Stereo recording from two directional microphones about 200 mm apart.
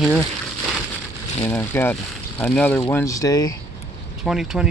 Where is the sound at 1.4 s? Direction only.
10° left (ahead or behind).